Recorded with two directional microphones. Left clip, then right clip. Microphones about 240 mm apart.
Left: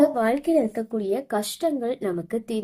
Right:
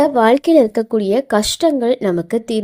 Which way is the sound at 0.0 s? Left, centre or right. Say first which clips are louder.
Right 8 dB; right.